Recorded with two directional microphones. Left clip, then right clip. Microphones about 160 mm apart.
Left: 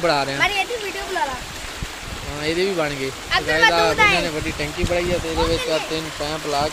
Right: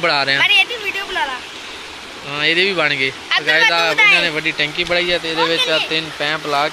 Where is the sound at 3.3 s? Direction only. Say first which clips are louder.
Right 2 dB; 50° left (ahead or behind).